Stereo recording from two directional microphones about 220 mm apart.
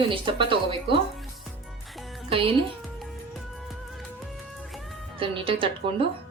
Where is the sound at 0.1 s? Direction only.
25° right (ahead or behind).